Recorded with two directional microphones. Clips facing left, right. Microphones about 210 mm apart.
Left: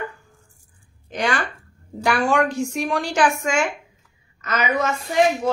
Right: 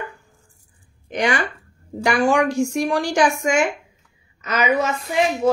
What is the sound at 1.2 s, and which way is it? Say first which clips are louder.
Speech: right 2 dB; 20° right (ahead or behind).